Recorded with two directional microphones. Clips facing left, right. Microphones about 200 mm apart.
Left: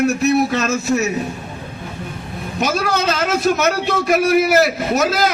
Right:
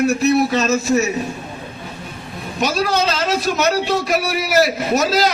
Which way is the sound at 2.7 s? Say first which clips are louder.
Even; 55° left (ahead or behind).